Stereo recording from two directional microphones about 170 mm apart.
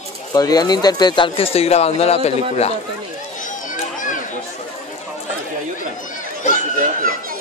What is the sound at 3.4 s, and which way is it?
Children playing, 50° left (ahead or behind).